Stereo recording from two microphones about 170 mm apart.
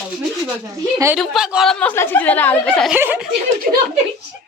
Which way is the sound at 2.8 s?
10° right (ahead or behind).